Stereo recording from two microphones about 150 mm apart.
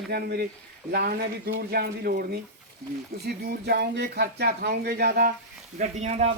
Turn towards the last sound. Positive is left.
turn(degrees=-45)  # may be behind; listen again after turning